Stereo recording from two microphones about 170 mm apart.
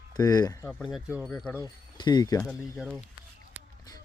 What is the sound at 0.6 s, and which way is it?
Speech, centre (ahead or behind).